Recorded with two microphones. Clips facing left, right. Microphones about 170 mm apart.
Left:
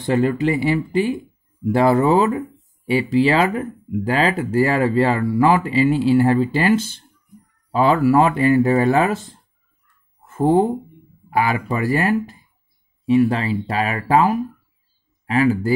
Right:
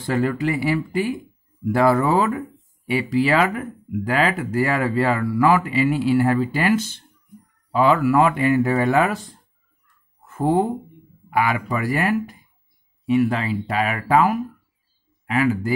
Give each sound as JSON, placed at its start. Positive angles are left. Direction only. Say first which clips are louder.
{"t": 0.0, "sound": "speech", "louder": "left 3 dB", "side_deg": 20}
{"t": 11.2, "sound": "speech", "louder": "left 2 dB", "side_deg": 30}